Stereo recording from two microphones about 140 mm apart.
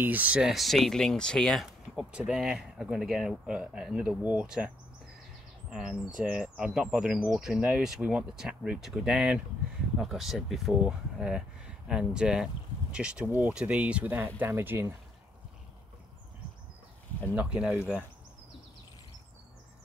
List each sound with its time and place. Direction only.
0.0 s speech: 10° right (ahead or behind)
17.4 s speech: 5° right (ahead or behind)